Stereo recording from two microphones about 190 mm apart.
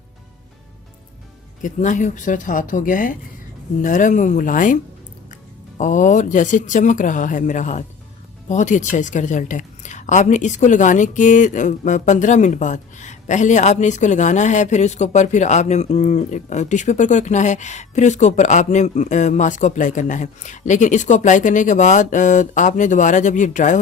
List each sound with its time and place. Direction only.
1.6 s a woman's voice: 40° left (ahead or behind)